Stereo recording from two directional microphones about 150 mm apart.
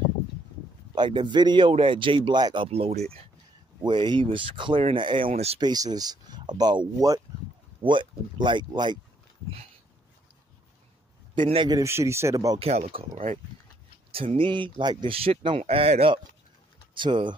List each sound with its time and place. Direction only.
0.9 s a man's voice: 30° right (ahead or behind)
5.3 s speech: 45° right (ahead or behind)
5.6 s a man's voice: 25° right (ahead or behind)
11.5 s a man's voice: 30° right (ahead or behind)
11.8 s speech: 20° right (ahead or behind)
12.5 s a man's voice: 40° right (ahead or behind)
13.1 s speech: 55° right (ahead or behind)
14.1 s a man's voice: 35° right (ahead or behind)